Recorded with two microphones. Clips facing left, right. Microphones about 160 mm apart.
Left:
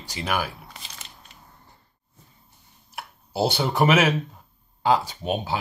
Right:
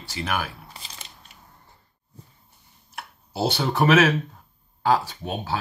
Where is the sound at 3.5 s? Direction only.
15° left (ahead or behind).